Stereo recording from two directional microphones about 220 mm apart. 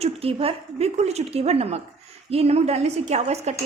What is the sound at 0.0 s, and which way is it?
A woman's voice, 25° right (ahead or behind).